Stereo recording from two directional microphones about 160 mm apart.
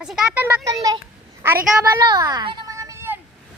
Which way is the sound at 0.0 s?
5° right (ahead or behind).